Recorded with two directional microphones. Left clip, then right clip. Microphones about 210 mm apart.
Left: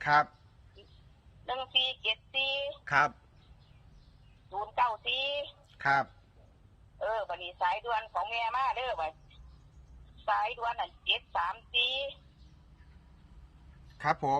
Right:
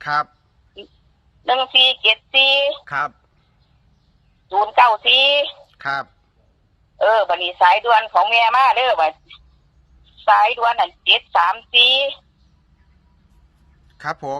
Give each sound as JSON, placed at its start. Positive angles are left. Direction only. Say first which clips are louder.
{"t": 0.0, "sound": "speech", "louder": "right 5 dB", "side_deg": -20}
{"t": 1.5, "sound": "speech", "louder": "right 16 dB", "side_deg": -40}
{"t": 2.8, "sound": "speech", "louder": "right 4 dB", "side_deg": -20}
{"t": 4.4, "sound": "speech", "louder": "right 17 dB", "side_deg": -40}
{"t": 5.7, "sound": "speech", "louder": "right 2 dB", "side_deg": -25}
{"t": 7.0, "sound": "speech", "louder": "right 18 dB", "side_deg": -40}
{"t": 10.2, "sound": "speech", "louder": "right 17 dB", "side_deg": -40}
{"t": 14.0, "sound": "speech", "louder": "right 4 dB", "side_deg": -25}